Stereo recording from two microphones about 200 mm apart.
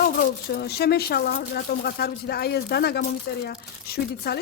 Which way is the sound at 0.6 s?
55° left (ahead or behind).